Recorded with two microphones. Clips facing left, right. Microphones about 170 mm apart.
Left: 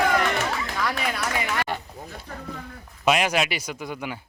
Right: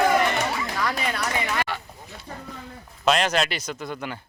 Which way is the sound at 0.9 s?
Centre (ahead or behind).